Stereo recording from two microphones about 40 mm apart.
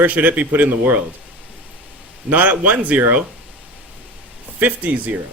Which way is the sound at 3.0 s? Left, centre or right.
Right.